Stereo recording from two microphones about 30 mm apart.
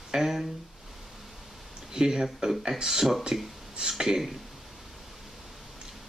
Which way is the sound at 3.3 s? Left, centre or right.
Right.